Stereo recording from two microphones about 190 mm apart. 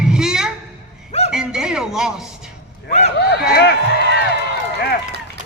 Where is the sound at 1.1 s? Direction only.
35° left (ahead or behind).